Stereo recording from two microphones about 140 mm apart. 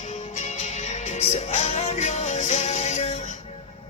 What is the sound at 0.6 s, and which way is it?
Music, 55° left (ahead or behind).